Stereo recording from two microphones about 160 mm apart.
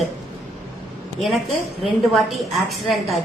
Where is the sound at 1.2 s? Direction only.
Centre (ahead or behind).